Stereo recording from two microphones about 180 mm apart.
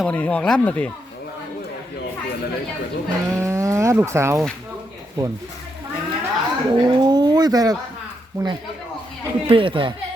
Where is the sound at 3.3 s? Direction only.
15° right (ahead or behind).